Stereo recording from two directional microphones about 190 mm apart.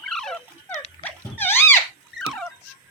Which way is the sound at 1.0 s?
10° left (ahead or behind).